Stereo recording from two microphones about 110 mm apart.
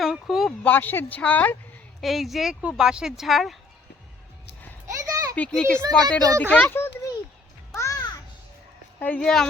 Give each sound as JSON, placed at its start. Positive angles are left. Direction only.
{"t": 0.0, "sound": "a sound", "side_deg": 0}
{"t": 0.6, "sound": "a child's voice", "side_deg": 15}
{"t": 2.0, "sound": "speech", "side_deg": 0}
{"t": 5.3, "sound": "a child's voice", "side_deg": 10}
{"t": 7.7, "sound": "music", "side_deg": 30}
{"t": 9.0, "sound": "a child's voice", "side_deg": 15}